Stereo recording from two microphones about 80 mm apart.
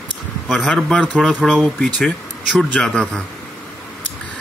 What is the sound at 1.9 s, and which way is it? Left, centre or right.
Speech, centre.